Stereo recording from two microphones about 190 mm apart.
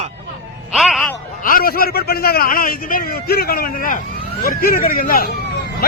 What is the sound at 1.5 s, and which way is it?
A man's voice, 50° left (ahead or behind).